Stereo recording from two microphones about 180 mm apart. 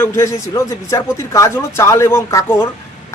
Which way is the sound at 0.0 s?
15° left (ahead or behind).